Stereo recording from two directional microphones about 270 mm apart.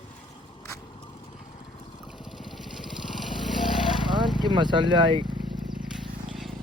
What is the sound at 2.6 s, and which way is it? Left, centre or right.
Lawn mower, centre.